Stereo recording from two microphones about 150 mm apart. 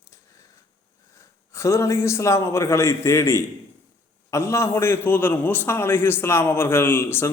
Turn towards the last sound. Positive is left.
turn(degrees=15)  # may be behind; listen again after turning